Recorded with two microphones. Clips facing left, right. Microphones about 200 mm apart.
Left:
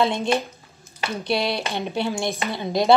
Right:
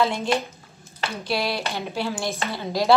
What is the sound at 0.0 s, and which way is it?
A woman's voice, 20° left (ahead or behind).